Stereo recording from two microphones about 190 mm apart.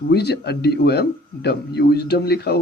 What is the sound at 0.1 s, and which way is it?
A man's voice, 60° left (ahead or behind).